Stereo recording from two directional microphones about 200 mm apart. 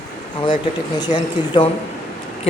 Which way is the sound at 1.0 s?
20° left (ahead or behind).